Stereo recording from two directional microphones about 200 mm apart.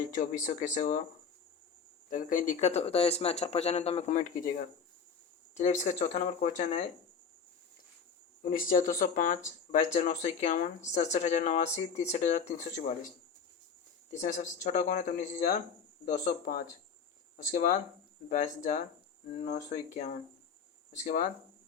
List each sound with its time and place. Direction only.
0.1 s speech: 40° left (ahead or behind)
2.0 s speech: 40° left (ahead or behind)
5.5 s speech: 35° left (ahead or behind)
8.4 s speech: 45° left (ahead or behind)
14.1 s speech: 35° left (ahead or behind)